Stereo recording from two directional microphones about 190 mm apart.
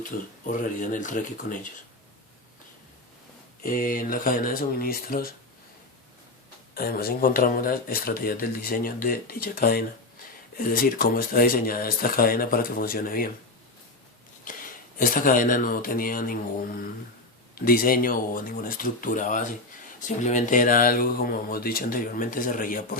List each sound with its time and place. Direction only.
0.0 s speech: 45° left (ahead or behind)
3.6 s speech: 50° left (ahead or behind)
6.7 s speech: 50° left (ahead or behind)
14.4 s speech: 45° left (ahead or behind)